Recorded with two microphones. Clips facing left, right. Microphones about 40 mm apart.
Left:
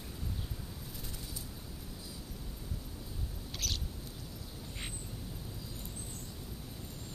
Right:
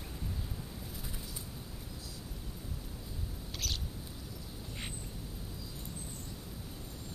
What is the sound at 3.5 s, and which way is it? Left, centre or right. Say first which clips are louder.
Rodents: even; centre.